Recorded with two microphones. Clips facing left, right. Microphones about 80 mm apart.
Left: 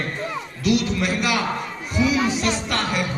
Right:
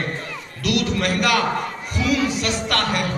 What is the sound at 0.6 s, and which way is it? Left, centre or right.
Speech, right.